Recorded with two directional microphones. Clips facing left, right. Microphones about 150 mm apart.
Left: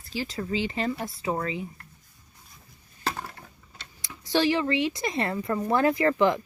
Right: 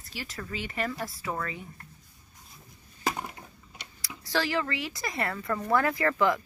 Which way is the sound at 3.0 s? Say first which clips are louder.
Right 1 dB; 15° right (ahead or behind).